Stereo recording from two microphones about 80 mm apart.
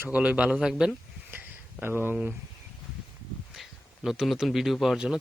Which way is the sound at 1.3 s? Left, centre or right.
Right.